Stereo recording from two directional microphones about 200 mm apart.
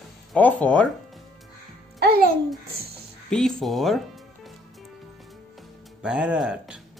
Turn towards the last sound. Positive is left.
turn(degrees=-5)  # may be behind; listen again after turning